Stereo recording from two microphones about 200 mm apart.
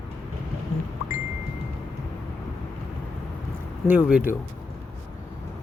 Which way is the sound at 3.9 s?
5° right (ahead or behind).